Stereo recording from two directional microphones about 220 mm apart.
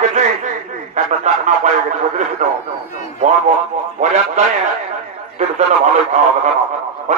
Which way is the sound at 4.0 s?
35° right (ahead or behind).